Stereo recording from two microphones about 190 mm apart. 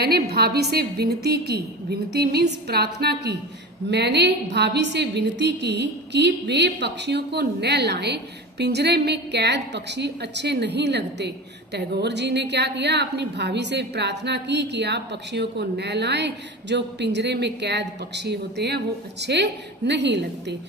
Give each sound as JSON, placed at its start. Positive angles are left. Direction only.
{"t": 0.0, "sound": "a woman's voice", "side_deg": -55}